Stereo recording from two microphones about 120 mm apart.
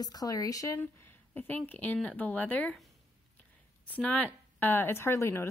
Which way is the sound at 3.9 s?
15° left (ahead or behind).